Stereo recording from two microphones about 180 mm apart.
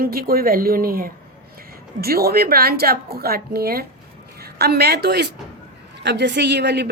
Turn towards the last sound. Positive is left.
turn(degrees=-70)  # may be behind; listen again after turning